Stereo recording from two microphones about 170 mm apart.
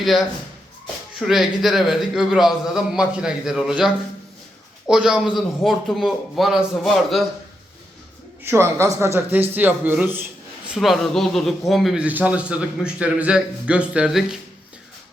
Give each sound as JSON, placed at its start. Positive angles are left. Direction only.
{"t": 0.0, "sound": "a man's voice", "side_deg": 0}
{"t": 1.3, "sound": "a man's voice", "side_deg": 0}
{"t": 8.4, "sound": "a man's voice", "side_deg": -15}
{"t": 10.8, "sound": "a man's voice", "side_deg": 0}